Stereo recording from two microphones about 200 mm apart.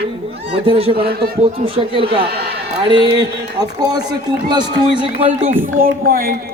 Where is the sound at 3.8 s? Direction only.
20° right (ahead or behind).